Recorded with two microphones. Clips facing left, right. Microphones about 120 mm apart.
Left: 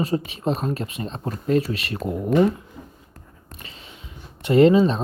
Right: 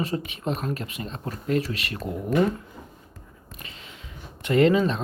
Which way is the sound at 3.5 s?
25° left (ahead or behind).